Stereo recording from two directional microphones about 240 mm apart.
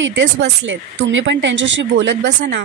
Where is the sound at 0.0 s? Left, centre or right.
Right.